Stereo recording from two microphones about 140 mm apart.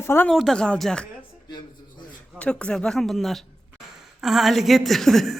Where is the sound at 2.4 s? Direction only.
10° left (ahead or behind).